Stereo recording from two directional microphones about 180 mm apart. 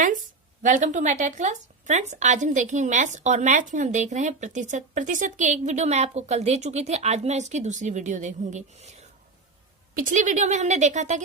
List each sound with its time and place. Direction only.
0.0 s a woman's voice: 45° right (ahead or behind)